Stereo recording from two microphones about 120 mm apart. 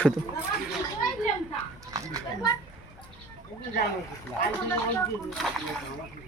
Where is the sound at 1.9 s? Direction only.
30° right (ahead or behind).